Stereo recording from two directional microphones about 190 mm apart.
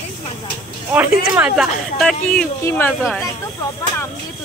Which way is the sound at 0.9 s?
10° right (ahead or behind).